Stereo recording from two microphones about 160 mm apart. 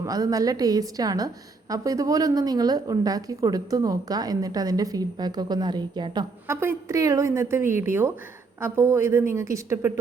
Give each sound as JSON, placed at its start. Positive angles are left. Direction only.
{"t": 0.0, "sound": "a woman's voice", "side_deg": -20}
{"t": 6.5, "sound": "a woman's voice", "side_deg": -15}